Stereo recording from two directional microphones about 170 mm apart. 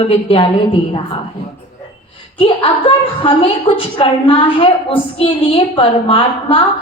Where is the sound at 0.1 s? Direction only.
35° left (ahead or behind).